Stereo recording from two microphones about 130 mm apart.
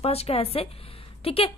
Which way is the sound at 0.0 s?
50° left (ahead or behind).